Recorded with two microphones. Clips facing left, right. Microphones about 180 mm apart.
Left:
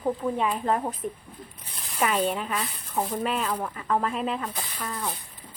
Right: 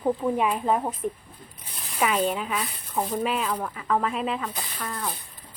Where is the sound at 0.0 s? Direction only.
10° right (ahead or behind).